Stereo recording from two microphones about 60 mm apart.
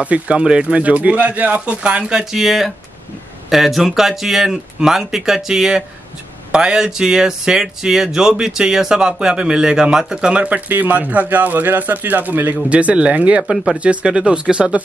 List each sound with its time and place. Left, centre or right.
0.0 s speech: right